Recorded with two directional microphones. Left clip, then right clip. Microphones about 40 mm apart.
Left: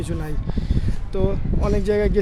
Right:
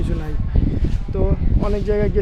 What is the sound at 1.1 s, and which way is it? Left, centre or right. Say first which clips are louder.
Speech: even; left.